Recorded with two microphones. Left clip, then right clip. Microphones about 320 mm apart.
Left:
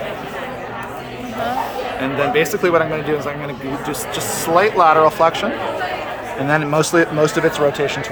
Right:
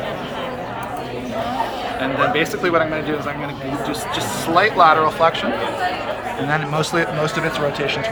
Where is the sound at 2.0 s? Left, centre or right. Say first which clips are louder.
Left 1 dB; left.